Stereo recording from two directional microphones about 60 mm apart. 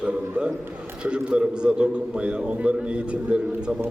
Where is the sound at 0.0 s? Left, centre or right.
Centre.